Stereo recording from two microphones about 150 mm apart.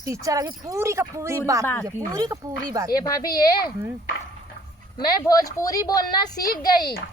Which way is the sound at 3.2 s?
90° left.